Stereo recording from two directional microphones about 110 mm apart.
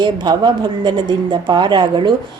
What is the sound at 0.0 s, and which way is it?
A woman's voice, 45° right (ahead or behind).